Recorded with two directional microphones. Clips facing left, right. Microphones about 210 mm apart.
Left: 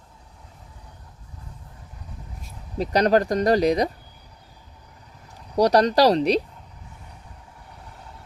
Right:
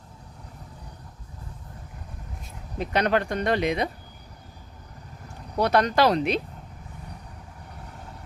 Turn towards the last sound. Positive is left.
turn(degrees=35)  # may be behind; listen again after turning